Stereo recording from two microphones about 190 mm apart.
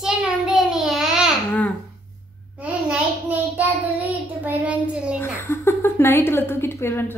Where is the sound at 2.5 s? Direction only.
5° right (ahead or behind).